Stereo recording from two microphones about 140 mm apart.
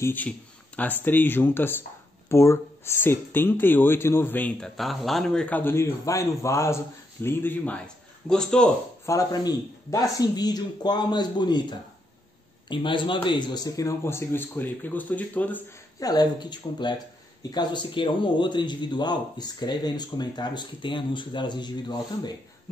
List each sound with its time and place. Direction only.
0.0 s speech: 15° left (ahead or behind)
9.0 s speech: 25° left (ahead or behind)
12.6 s speech: 35° left (ahead or behind); by 15.6 s 10° left (ahead or behind)
16.0 s a man's voice: 30° left (ahead or behind)